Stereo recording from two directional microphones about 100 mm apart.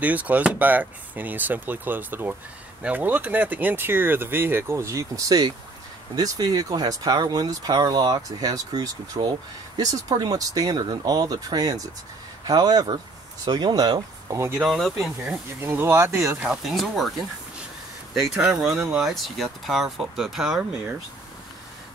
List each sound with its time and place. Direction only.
0.0 s speech: 15° right (ahead or behind); by 14.4 s 45° right (ahead or behind)
14.6 s speech: centre (ahead or behind)
15.2 s speech: 25° right (ahead or behind)
16.3 s speech: 5° right (ahead or behind)
18.3 s speech: 5° right (ahead or behind)